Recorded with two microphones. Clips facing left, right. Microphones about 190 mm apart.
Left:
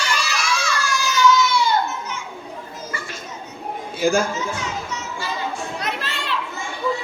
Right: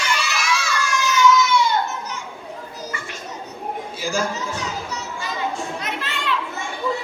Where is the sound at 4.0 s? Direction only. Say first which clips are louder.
Left 8 dB; 55° left (ahead or behind).